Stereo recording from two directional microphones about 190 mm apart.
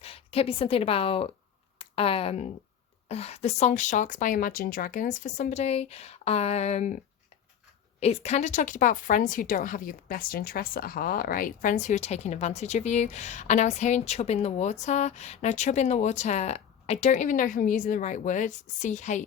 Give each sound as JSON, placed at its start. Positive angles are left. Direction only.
{"t": 0.0, "sound": "a woman's voice", "side_deg": 30}